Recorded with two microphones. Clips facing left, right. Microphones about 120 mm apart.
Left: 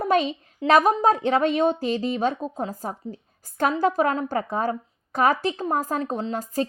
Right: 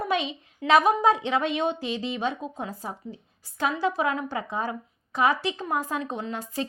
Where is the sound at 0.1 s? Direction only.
45° left (ahead or behind).